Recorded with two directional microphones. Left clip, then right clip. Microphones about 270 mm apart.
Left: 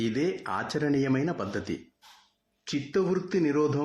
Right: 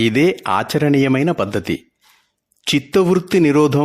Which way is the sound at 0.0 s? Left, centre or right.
Right.